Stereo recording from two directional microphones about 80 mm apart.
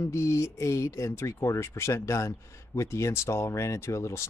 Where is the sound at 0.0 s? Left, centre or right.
Left.